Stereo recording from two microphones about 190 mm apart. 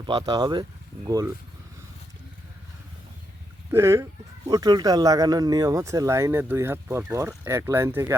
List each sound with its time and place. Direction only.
0.0 s speech: 20° right (ahead or behind)
3.7 s speech: 15° right (ahead or behind)